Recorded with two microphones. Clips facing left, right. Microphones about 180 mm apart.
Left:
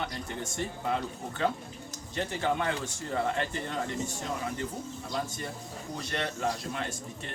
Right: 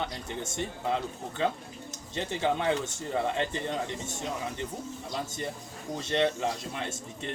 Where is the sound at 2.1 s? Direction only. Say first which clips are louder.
Right 1 dB; 20° right (ahead or behind).